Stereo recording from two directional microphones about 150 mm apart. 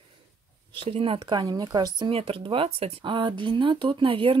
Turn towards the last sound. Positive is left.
turn(degrees=-35)  # may be behind; listen again after turning